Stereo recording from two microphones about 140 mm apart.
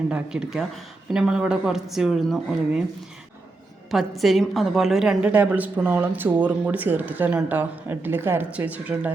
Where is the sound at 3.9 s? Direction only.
Centre (ahead or behind).